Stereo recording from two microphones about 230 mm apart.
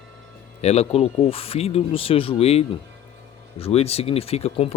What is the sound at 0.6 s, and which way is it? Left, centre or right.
A man's voice, left.